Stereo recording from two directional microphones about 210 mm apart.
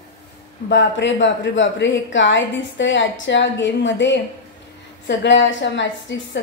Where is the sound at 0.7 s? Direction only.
60° left (ahead or behind).